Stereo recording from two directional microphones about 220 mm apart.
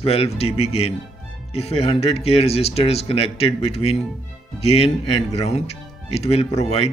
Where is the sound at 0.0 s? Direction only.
25° left (ahead or behind).